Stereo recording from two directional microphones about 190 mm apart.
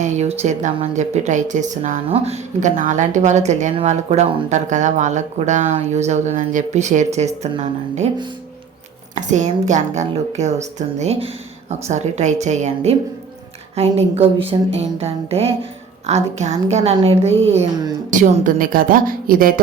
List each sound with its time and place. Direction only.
0.0 s a woman's voice: 35° right (ahead or behind)
9.1 s a woman's voice: 40° right (ahead or behind)
18.1 s a woman's voice: 45° right (ahead or behind)